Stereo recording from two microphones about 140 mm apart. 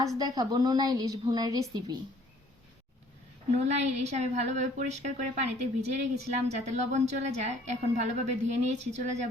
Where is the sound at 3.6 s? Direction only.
50° right (ahead or behind).